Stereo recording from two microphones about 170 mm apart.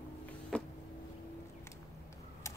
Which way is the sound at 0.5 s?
5° left (ahead or behind).